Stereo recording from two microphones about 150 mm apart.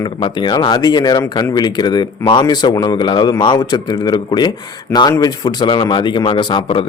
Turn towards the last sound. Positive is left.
turn(degrees=30)  # may be behind; listen again after turning